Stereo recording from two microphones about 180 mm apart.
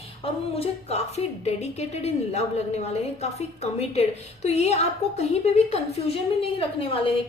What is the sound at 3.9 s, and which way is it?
A woman's voice, 40° left (ahead or behind).